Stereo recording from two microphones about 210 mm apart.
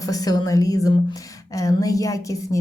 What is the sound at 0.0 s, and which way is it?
A woman's voice, 15° left (ahead or behind).